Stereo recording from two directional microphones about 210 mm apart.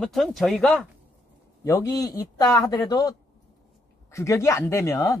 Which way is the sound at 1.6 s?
15° left (ahead or behind).